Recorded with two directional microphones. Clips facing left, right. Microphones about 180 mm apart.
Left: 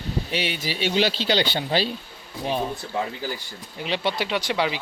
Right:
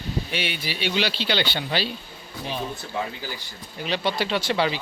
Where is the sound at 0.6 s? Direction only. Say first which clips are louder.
Left 4 dB; 45° left (ahead or behind).